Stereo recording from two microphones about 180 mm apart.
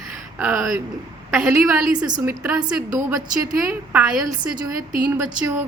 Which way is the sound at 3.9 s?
5° right (ahead or behind).